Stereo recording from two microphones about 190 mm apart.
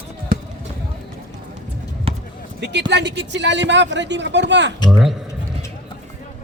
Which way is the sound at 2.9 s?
65° right (ahead or behind).